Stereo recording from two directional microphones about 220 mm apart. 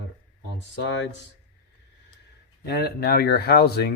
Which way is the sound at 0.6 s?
55° left (ahead or behind).